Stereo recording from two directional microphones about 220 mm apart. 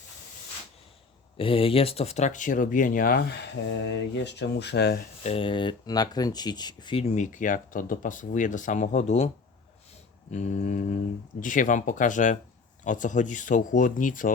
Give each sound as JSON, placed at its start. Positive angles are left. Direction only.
{"t": 1.4, "sound": "speech", "side_deg": 25}
{"t": 5.2, "sound": "speech", "side_deg": 25}
{"t": 10.3, "sound": "speech", "side_deg": 30}